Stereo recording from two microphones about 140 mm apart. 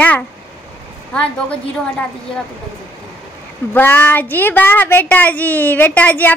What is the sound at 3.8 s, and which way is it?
Speech, 15° left (ahead or behind).